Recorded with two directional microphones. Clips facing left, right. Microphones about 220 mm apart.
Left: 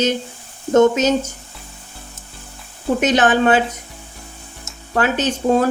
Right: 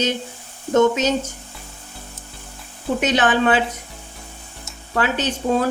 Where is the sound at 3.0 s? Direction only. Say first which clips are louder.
Left 3 dB; 45° left (ahead or behind).